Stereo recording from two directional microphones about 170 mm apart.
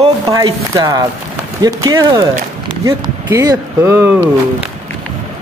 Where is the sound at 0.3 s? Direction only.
20° right (ahead or behind).